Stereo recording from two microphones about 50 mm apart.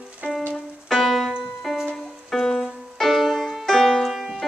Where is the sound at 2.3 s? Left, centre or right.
Centre.